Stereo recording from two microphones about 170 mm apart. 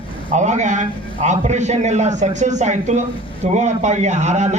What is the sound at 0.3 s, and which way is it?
A man's voice, 45° right (ahead or behind).